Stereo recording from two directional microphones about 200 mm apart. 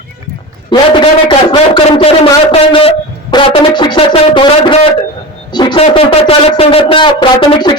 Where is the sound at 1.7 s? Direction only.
30° left (ahead or behind).